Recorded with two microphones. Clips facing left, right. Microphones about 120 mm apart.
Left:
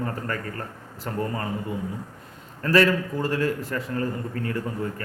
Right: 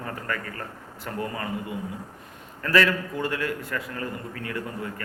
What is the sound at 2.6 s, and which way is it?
Speech, 30° left (ahead or behind).